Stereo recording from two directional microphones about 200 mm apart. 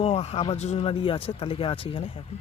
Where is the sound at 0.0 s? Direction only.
30° left (ahead or behind).